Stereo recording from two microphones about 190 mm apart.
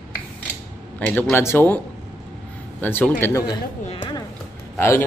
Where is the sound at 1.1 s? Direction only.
10° left (ahead or behind).